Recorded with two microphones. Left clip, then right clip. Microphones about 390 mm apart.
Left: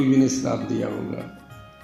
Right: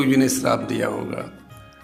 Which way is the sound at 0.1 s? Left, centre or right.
Right.